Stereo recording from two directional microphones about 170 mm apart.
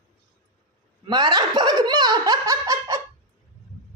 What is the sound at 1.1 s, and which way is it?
Speech, 25° right (ahead or behind).